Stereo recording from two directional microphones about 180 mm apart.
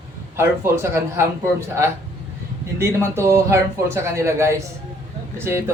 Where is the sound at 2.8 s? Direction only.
15° right (ahead or behind).